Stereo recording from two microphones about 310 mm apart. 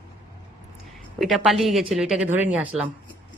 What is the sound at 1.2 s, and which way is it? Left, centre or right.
A woman's voice, centre.